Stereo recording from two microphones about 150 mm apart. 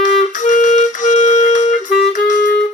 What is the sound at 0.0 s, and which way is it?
Music, 55° left (ahead or behind).